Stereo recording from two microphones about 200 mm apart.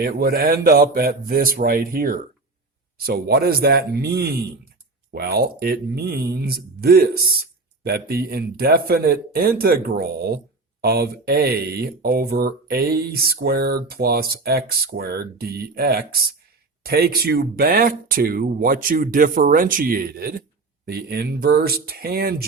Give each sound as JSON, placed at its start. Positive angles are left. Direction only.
{"t": 0.0, "sound": "a man's voice", "side_deg": -45}